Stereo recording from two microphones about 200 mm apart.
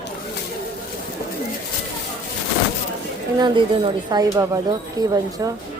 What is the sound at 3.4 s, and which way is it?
Speech, 20° right (ahead or behind).